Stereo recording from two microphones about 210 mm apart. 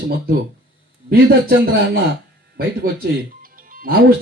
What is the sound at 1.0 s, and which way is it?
Speech, 45° right (ahead or behind).